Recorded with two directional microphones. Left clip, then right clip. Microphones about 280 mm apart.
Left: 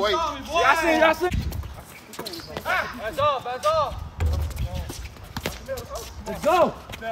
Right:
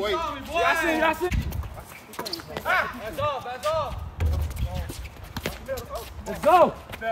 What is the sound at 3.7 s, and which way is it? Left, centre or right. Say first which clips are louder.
Basketball bounce: left 4 dB; centre.